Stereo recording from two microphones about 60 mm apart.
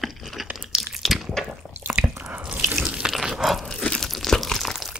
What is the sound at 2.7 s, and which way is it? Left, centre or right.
Sink, right.